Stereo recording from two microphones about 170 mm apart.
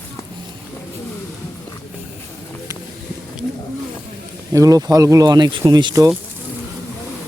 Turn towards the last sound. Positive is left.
turn(degrees=-25)  # may be behind; listen again after turning